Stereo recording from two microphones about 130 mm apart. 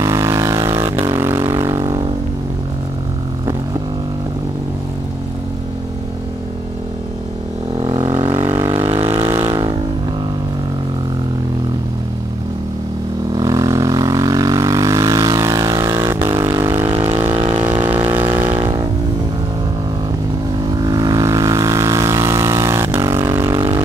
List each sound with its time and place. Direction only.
0.0 s vehicle: 25° right (ahead or behind)
7.7 s vehicle: 40° right (ahead or behind)
9.5 s vehicle: 35° right (ahead or behind)
13.4 s vehicle: 25° right (ahead or behind)
16.9 s vehicle: 45° right (ahead or behind)
18.3 s music: 15° right (ahead or behind)
18.6 s vehicle: 40° right (ahead or behind)
20.7 s vehicle: 30° right (ahead or behind)